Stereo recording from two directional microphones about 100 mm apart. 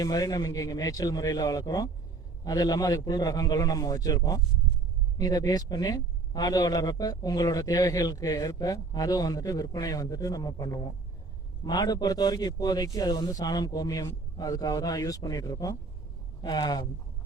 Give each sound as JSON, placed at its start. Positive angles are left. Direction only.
{"t": 0.0, "sound": "a man's voice", "side_deg": 40}